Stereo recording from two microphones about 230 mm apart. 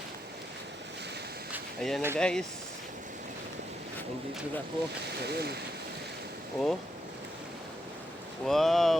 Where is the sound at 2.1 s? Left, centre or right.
Centre.